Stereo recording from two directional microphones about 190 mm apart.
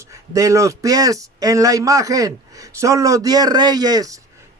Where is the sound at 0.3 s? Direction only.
15° right (ahead or behind).